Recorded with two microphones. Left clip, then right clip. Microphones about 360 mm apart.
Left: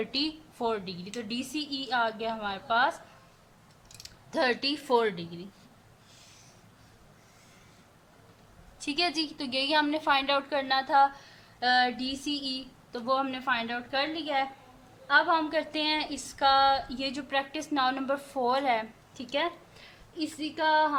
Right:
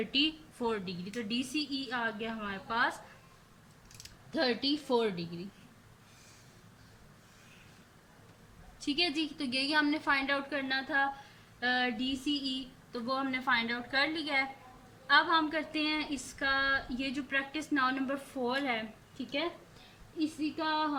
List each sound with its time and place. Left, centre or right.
0.0 s a woman's voice: centre
3.9 s typing: centre
4.9 s a woman's voice: left
8.8 s a woman's voice: centre